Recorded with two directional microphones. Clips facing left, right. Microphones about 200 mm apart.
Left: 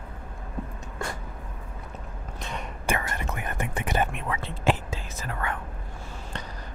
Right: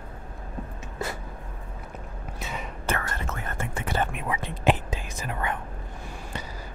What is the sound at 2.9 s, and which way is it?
Whispering, 15° left (ahead or behind).